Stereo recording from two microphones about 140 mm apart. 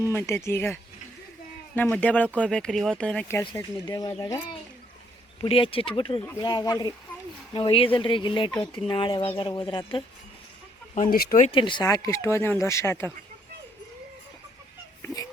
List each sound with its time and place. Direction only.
0.0 s speech: 20° left (ahead or behind)
3.5 s speech: 25° left (ahead or behind)
5.4 s speech: 40° left (ahead or behind)
7.5 s speech: 40° left (ahead or behind)
10.9 s speech: 85° left
11.5 s speech: 35° left (ahead or behind)
11.9 s speech: 25° left (ahead or behind)
15.0 s a sound: 25° left (ahead or behind)